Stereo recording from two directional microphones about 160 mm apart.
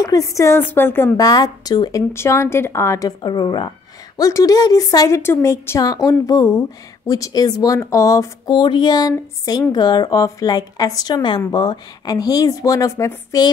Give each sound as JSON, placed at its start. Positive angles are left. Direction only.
{"t": 0.0, "sound": "speech", "side_deg": 20}